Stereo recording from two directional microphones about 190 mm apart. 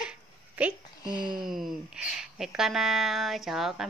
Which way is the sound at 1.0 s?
20° left (ahead or behind).